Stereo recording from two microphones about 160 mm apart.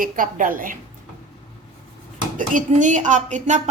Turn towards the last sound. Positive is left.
turn(degrees=-50)  # may be behind; listen again after turning